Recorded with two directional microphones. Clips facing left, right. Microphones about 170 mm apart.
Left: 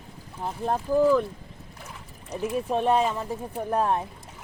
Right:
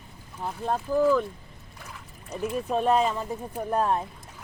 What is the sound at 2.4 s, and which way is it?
Speech, centre (ahead or behind).